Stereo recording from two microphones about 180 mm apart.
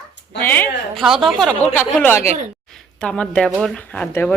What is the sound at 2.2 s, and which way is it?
Speech, 35° right (ahead or behind).